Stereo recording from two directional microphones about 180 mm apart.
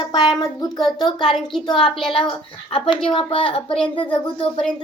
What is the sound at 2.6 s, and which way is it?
Speech, 25° left (ahead or behind).